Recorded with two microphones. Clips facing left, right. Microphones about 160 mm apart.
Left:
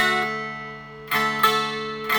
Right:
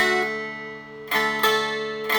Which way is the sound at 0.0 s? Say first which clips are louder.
Right 2 dB; 30° right (ahead or behind).